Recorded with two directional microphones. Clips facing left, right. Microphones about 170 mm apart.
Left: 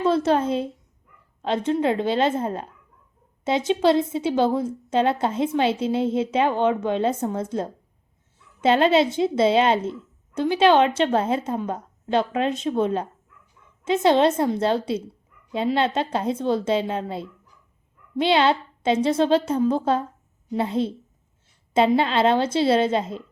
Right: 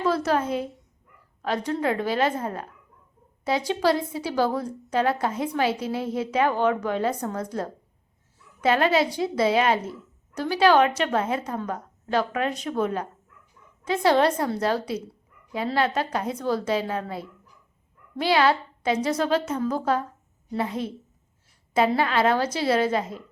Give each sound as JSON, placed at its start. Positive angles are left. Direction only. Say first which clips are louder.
{"t": 0.0, "sound": "a woman's voice", "louder": "left 4 dB", "side_deg": 25}
{"t": 21.9, "sound": "a woman's voice", "louder": "left 3 dB", "side_deg": 25}